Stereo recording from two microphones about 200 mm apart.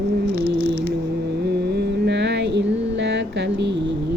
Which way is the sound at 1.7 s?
55° right (ahead or behind).